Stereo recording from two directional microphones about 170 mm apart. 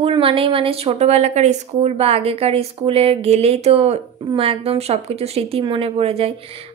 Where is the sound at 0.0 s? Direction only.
30° right (ahead or behind).